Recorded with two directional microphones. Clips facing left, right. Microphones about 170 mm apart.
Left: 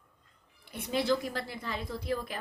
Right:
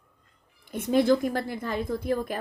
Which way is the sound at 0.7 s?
45° right (ahead or behind).